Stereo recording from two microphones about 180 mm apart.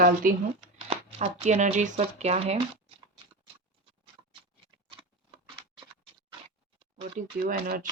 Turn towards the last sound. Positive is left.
turn(degrees=-55)  # may be behind; listen again after turning